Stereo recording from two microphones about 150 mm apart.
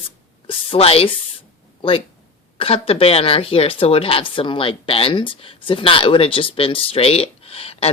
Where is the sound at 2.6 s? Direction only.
40° left (ahead or behind).